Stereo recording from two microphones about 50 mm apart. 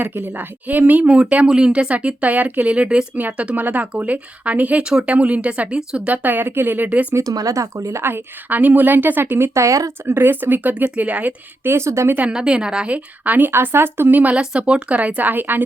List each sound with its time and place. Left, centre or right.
0.0 s speech: right
4.8 s a woman's voice: centre
6.1 s speech: right
7.1 s speech: right
8.0 s speech: right
9.6 s speech: right
10.1 s speech: right
11.6 s speech: right
12.3 s a woman's voice: centre
12.9 s speech: right
13.5 s speech: right
14.1 s speech: right
14.3 s speech: right